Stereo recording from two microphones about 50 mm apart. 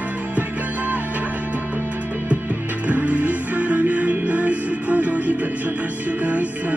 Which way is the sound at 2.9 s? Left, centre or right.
Right.